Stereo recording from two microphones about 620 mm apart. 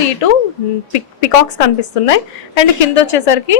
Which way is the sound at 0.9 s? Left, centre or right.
Left.